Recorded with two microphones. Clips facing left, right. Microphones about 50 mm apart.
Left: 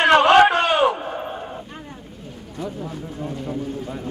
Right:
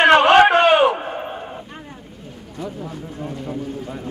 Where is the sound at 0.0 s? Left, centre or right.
Right.